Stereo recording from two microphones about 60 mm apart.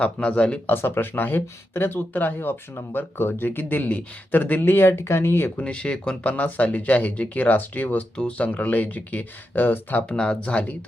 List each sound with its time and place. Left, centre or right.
0.0 s speech: centre
0.7 s speech: left
5.5 s speech: centre
8.1 s speech: centre
10.1 s speech: centre